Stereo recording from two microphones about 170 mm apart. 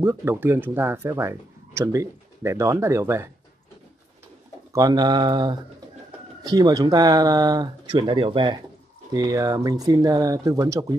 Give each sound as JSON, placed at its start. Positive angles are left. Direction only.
{"t": 0.0, "sound": "speech", "side_deg": -15}
{"t": 4.7, "sound": "speech", "side_deg": -25}